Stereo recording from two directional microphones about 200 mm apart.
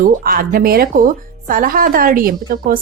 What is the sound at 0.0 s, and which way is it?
Speech, 45° right (ahead or behind).